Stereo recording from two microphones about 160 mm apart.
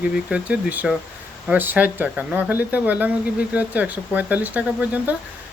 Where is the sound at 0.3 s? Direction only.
5° right (ahead or behind).